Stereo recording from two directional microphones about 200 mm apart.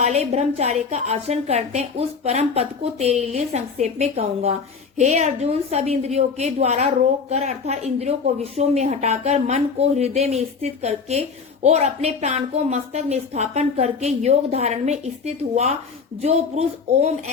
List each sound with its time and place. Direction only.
0.0 s speech: 30° right (ahead or behind)